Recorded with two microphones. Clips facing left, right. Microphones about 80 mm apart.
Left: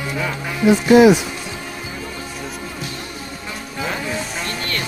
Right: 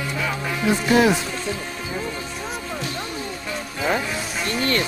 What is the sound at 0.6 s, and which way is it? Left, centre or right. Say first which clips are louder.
Music: left 7 dB; centre.